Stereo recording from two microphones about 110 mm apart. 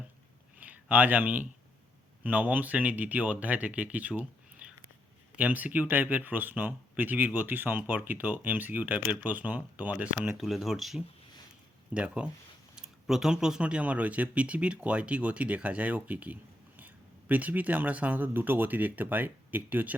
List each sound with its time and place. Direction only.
0.6 s speech: 15° right (ahead or behind)
10.3 s speech: centre (ahead or behind)
11.9 s speech: 10° right (ahead or behind)